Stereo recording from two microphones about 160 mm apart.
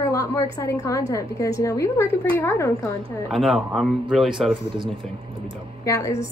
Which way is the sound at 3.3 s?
Centre (ahead or behind).